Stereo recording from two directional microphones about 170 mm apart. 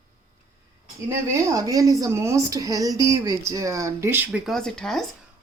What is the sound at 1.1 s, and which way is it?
Speech, 20° right (ahead or behind).